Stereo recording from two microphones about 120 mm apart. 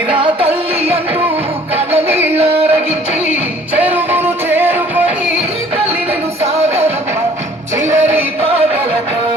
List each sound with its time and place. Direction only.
0.1 s music: 45° right (ahead or behind)
1.7 s music: 55° right (ahead or behind)
3.8 s music: 15° right (ahead or behind)
6.4 s music: 60° right (ahead or behind)